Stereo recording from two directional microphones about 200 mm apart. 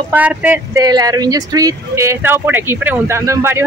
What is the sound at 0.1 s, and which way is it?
Speech, 10° right (ahead or behind).